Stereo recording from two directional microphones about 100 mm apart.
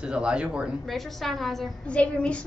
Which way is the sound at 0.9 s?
Centre (ahead or behind).